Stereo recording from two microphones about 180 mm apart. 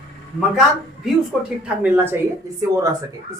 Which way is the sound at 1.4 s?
5° right (ahead or behind).